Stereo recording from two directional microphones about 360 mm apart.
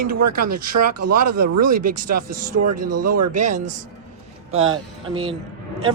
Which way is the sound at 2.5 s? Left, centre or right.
Right.